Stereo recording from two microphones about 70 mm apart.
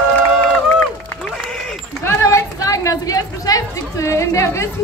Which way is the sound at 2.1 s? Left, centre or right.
Left.